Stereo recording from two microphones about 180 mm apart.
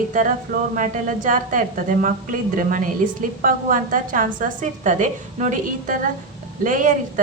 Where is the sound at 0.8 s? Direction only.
45° right (ahead or behind).